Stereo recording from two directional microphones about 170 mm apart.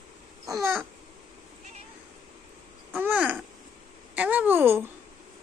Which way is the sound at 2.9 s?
10° right (ahead or behind).